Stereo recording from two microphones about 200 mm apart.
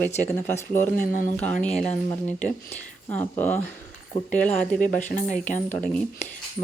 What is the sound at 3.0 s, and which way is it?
Speech, 10° left (ahead or behind).